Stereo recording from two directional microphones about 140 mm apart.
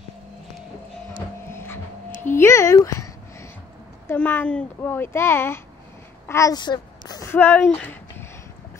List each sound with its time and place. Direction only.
1.5 s a sound: 15° left (ahead or behind)
2.2 s speech: 20° left (ahead or behind)
4.1 s speech: 15° left (ahead or behind)
7.2 s speech: 15° left (ahead or behind)